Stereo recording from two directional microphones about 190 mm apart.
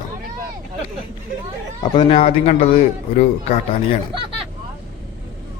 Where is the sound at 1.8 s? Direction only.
25° left (ahead or behind).